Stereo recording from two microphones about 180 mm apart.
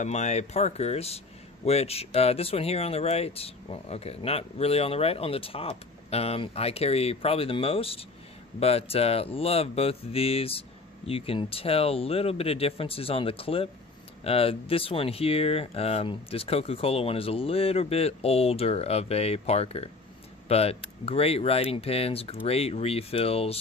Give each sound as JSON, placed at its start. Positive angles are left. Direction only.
{"t": 0.0, "sound": "speech", "side_deg": 40}